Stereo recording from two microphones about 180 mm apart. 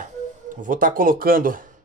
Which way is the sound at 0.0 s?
45° right (ahead or behind).